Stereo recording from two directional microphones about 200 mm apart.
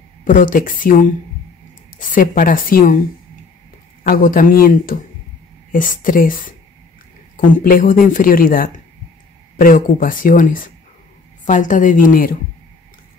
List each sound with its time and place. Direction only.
0.2 s a woman's voice: 40° left (ahead or behind)
4.1 s a woman's voice: 45° left (ahead or behind)